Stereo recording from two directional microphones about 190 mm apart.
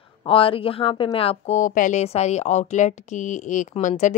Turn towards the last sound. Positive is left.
turn(degrees=40)  # may be behind; listen again after turning